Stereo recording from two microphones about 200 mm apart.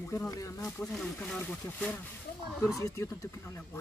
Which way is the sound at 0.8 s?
5° left (ahead or behind).